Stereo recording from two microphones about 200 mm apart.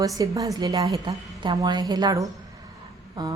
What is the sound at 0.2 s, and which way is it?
A woman's voice, 15° right (ahead or behind).